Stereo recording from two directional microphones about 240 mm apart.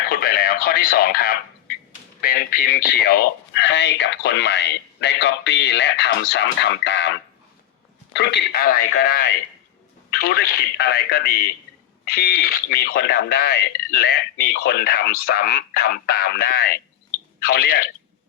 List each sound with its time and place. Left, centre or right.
0.1 s radio: left
2.2 s speech: left
8.1 s speech: left